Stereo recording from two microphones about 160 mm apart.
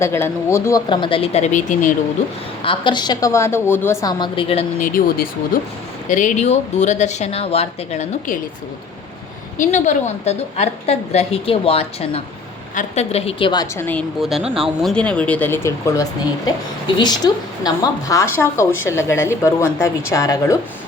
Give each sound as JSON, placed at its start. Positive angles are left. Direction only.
{"t": 0.0, "sound": "speech", "side_deg": 15}
{"t": 0.9, "sound": "speech", "side_deg": 35}
{"t": 2.6, "sound": "a woman's voice", "side_deg": 30}
{"t": 4.2, "sound": "a woman's voice", "side_deg": 35}
{"t": 4.8, "sound": "speech", "side_deg": 60}
{"t": 6.1, "sound": "speech", "side_deg": 50}
{"t": 9.6, "sound": "a woman's voice", "side_deg": 50}
{"t": 13.7, "sound": "speech", "side_deg": 10}
{"t": 14.2, "sound": "speech", "side_deg": 0}
{"t": 14.4, "sound": "speech", "side_deg": -35}
{"t": 14.8, "sound": "a woman's voice", "side_deg": 5}